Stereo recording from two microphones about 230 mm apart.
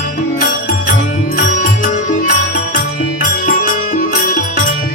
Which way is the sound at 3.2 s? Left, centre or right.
Left.